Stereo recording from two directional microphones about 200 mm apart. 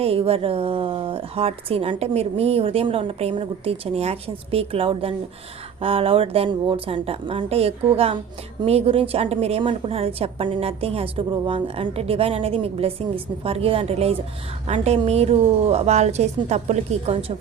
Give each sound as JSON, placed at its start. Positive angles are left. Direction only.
{"t": 0.0, "sound": "a woman's voice", "side_deg": -30}